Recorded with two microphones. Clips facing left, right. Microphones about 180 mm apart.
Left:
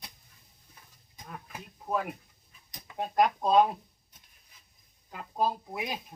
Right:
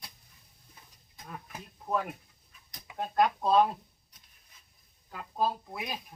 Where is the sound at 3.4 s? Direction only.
15° left (ahead or behind).